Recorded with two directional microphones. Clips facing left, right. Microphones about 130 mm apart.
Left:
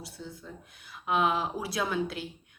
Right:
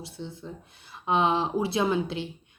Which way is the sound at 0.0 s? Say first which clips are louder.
Right 4 dB; 25° right (ahead or behind).